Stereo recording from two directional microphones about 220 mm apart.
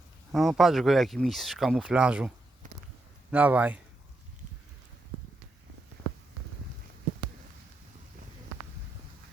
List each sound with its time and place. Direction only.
0.3 s speech: centre (ahead or behind)
2.6 s a sound: 35° right (ahead or behind)
3.3 s a man's voice: 5° right (ahead or behind)